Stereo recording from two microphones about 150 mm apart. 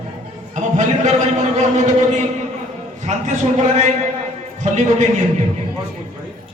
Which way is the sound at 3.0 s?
50° right (ahead or behind).